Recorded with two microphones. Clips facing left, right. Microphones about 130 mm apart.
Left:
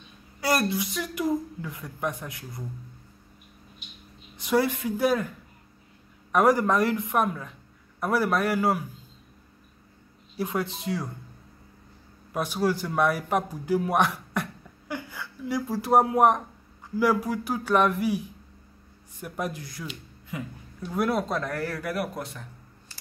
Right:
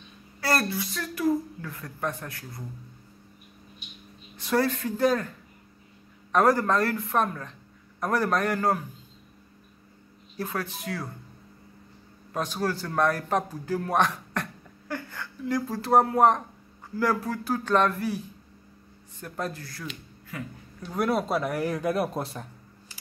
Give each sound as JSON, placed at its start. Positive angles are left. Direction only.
{"t": 0.4, "sound": "speech", "side_deg": 15}
{"t": 4.4, "sound": "speech", "side_deg": 15}
{"t": 6.3, "sound": "speech", "side_deg": 15}
{"t": 10.3, "sound": "speech", "side_deg": 15}
{"t": 12.3, "sound": "a man's voice", "side_deg": 10}
{"t": 20.9, "sound": "speech", "side_deg": 0}